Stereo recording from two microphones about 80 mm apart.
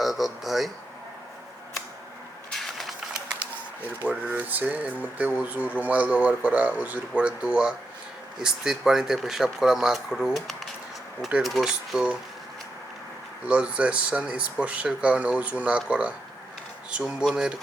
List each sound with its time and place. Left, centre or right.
0.0 s speech: centre
2.5 s a sound: centre
4.0 s speech: right
13.5 s speech: centre